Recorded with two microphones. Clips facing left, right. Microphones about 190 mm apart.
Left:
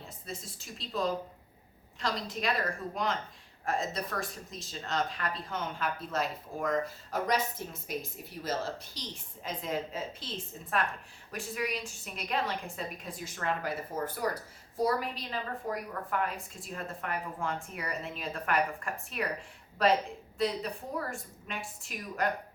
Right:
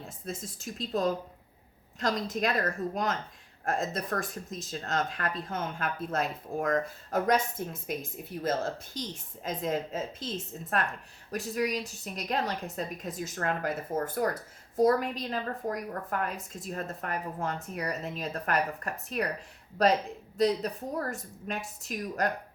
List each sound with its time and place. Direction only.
0.3 s a woman's voice: 45° right (ahead or behind)